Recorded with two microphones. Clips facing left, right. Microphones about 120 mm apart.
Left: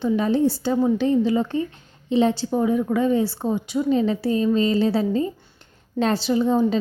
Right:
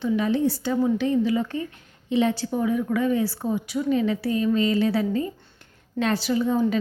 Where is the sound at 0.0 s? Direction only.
35° left (ahead or behind).